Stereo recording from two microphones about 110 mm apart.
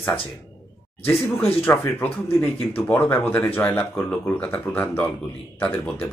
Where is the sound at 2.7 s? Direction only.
20° left (ahead or behind).